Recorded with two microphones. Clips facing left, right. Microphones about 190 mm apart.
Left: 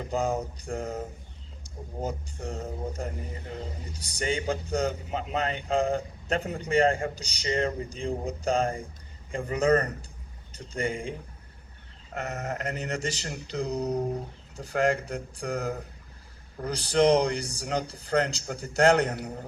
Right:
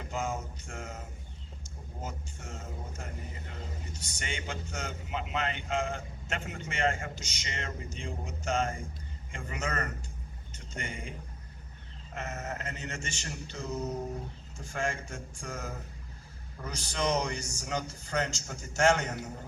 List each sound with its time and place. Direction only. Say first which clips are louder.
0.0 s a man's voice: left 7 dB; 35° left (ahead or behind)
12.6 s a man's voice: left 8 dB; 35° left (ahead or behind)